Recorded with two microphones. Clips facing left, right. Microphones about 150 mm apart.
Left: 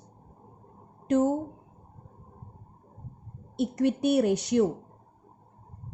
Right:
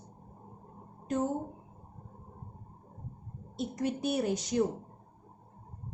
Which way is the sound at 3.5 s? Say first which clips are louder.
Left 8 dB; 65° left (ahead or behind).